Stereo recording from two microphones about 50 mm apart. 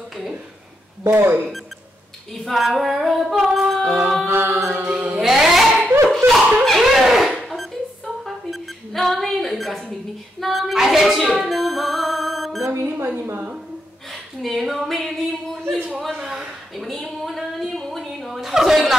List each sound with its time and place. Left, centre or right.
1.0 s speech: right
2.3 s female singing: centre
4.3 s chant: right
4.7 s chant: right
5.2 s a sound: centre
6.0 s dog: centre
7.0 s a sound: centre
10.4 s female singing: centre
11.4 s music: centre
12.7 s speech: right
14.4 s female singing: centre
16.2 s a sound: centre
18.5 s chuckle: centre